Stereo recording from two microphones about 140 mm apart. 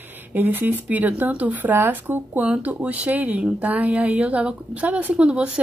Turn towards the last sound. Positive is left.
turn(degrees=-10)  # may be behind; listen again after turning